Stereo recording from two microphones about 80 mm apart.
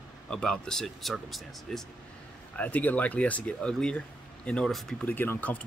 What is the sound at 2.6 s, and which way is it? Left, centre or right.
Speech, centre.